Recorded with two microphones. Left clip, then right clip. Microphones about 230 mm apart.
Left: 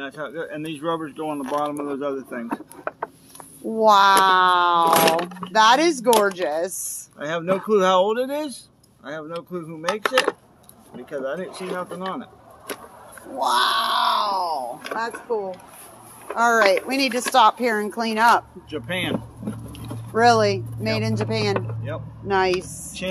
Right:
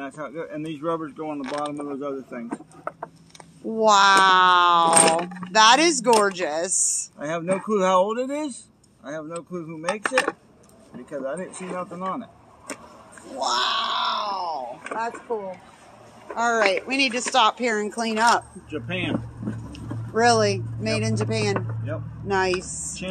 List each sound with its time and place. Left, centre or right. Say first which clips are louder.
0.0 s speech: left 2 dB; centre
3.6 s speech: left 2 dB; centre
7.2 s speech: left 4 dB; centre
13.4 s grunt: left 4 dB; centre; by 14.5 s left
14.9 s speech: left 1 dB; left
16.8 s speech: even; left; by 18.4 s centre
18.7 s speech: left 2 dB; centre
19.7 s speech: left 2 dB; centre
21.5 s vehicle: left 2 dB; left
22.3 s speech: left 2 dB; centre